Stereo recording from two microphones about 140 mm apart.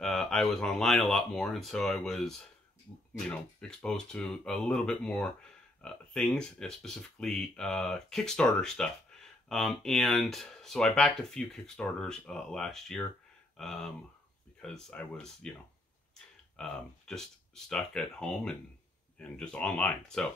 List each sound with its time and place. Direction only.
0.0 s speech: 5° left (ahead or behind)
16.5 s speech: 5° left (ahead or behind)